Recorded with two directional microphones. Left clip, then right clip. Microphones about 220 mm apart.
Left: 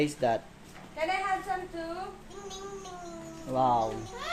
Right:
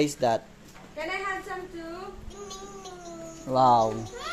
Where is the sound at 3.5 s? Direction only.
45° right (ahead or behind).